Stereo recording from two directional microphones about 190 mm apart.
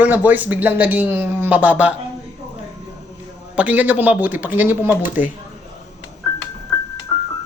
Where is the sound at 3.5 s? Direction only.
10° right (ahead or behind).